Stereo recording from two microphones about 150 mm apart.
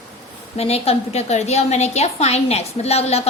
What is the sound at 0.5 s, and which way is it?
A woman's voice, 45° left (ahead or behind).